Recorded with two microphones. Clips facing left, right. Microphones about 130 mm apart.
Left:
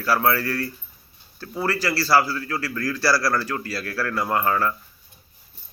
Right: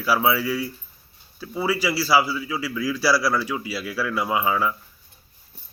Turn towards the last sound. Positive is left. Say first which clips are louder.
# even
turn(degrees=-5)  # may be behind; listen again after turning